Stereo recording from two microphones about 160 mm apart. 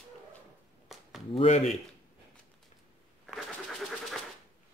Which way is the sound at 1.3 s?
40° left (ahead or behind).